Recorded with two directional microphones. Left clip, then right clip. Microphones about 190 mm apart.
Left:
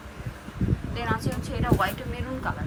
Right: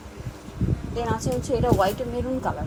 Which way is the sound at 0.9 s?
25° right (ahead or behind).